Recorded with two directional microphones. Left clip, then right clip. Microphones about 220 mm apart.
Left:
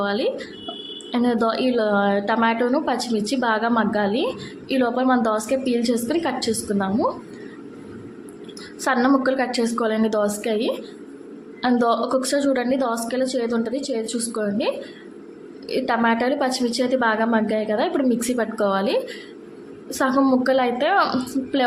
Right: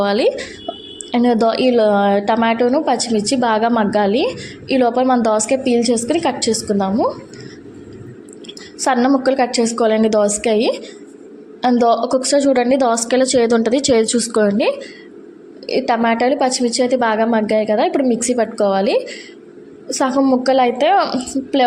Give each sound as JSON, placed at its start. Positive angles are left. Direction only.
{"t": 0.0, "sound": "a woman's voice", "side_deg": -25}
{"t": 8.8, "sound": "a woman's voice", "side_deg": -15}
{"t": 15.6, "sound": "a woman's voice", "side_deg": -15}